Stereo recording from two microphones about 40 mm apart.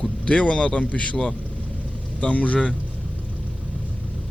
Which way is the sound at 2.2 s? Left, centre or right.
Left.